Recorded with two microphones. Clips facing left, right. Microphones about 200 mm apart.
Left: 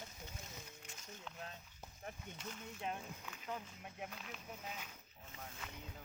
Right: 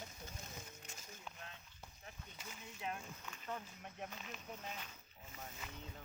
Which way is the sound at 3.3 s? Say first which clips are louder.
Right 1 dB; 5° left (ahead or behind).